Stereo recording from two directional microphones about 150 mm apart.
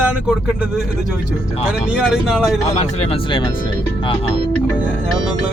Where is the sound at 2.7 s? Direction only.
40° left (ahead or behind).